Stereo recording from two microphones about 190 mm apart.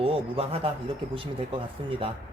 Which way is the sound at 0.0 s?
30° right (ahead or behind).